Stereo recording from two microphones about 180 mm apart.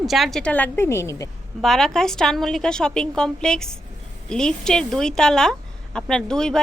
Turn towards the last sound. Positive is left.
turn(degrees=5)  # may be behind; listen again after turning